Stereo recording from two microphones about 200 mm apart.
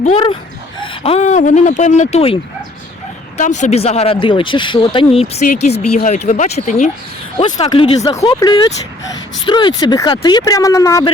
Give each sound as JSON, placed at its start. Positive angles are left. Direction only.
{"t": 0.0, "sound": "speech", "side_deg": 30}